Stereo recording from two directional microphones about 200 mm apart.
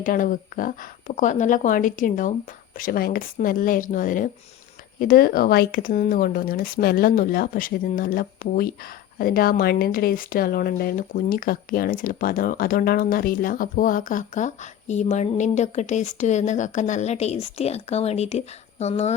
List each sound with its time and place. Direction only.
0.0 s speech: 40° left (ahead or behind)